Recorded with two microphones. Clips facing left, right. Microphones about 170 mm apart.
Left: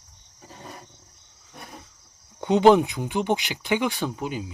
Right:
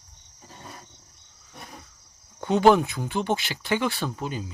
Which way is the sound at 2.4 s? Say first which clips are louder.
Left 2 dB; 20° left (ahead or behind).